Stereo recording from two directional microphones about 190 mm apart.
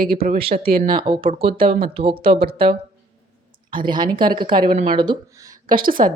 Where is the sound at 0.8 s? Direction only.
25° right (ahead or behind).